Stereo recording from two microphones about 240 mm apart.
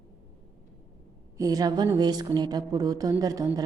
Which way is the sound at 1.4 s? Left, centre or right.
Centre.